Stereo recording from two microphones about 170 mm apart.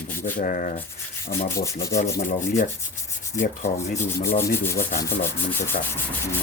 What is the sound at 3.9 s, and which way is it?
Rub, 15° left (ahead or behind).